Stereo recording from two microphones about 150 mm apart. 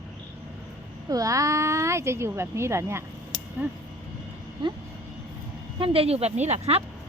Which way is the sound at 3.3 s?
30° left (ahead or behind).